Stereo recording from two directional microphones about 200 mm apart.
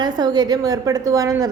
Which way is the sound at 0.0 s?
20° right (ahead or behind).